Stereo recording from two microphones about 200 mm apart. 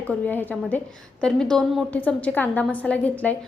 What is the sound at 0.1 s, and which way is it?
A woman's voice, 10° left (ahead or behind).